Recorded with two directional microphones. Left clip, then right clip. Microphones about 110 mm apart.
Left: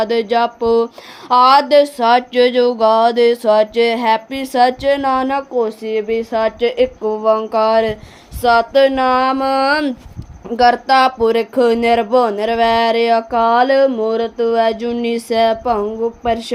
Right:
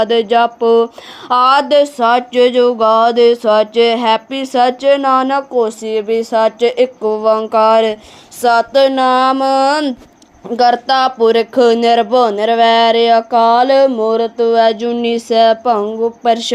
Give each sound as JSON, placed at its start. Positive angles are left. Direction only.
{"t": 0.0, "sound": "speech", "side_deg": -30}
{"t": 5.5, "sound": "speech", "side_deg": -45}
{"t": 8.4, "sound": "speech", "side_deg": -55}